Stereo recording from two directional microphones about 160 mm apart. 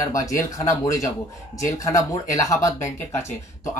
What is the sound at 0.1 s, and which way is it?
Speech, 20° left (ahead or behind).